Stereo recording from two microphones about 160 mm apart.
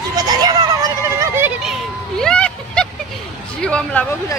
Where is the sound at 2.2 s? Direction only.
5° left (ahead or behind).